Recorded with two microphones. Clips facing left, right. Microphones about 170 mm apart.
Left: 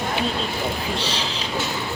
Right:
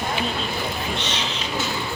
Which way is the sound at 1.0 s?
30° left (ahead or behind).